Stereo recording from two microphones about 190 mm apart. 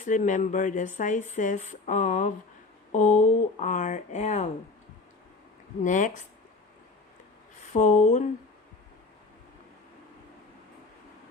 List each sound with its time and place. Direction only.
0.0 s speech: 40° left (ahead or behind)
5.8 s speech: 40° left (ahead or behind)
7.7 s speech: 40° left (ahead or behind)